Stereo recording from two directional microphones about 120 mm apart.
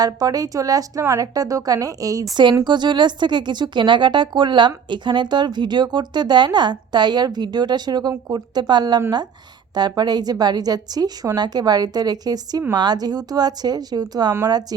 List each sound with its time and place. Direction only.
0.0 s a woman's voice: 30° right (ahead or behind)
2.3 s speech: 40° right (ahead or behind)